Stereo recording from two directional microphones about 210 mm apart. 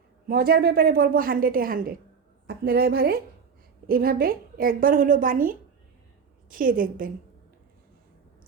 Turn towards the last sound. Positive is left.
turn(degrees=-40)  # may be behind; listen again after turning